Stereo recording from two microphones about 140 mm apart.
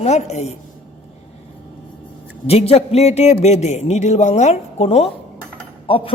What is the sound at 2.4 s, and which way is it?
A man's voice, 50° left (ahead or behind).